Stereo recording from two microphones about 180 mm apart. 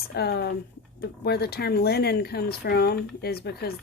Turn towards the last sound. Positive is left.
turn(degrees=60)  # may be behind; listen again after turning